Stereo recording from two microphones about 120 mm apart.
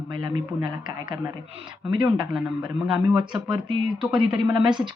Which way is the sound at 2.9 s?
40° right (ahead or behind).